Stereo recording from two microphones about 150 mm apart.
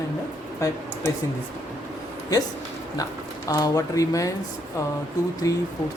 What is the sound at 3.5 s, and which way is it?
Speech, 25° left (ahead or behind).